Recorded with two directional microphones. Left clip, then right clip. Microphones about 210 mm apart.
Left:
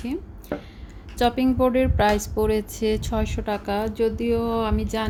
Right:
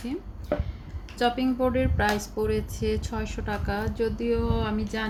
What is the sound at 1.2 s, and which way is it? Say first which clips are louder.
Speech: left 4 dB; 40° left (ahead or behind).